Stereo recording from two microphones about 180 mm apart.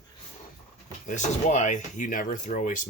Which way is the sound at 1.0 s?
40° left (ahead or behind).